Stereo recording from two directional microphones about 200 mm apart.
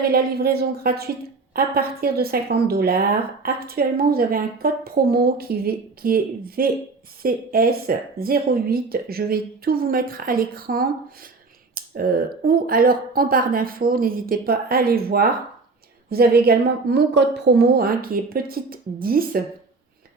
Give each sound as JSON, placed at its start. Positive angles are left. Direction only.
{"t": 0.1, "sound": "speech", "side_deg": -50}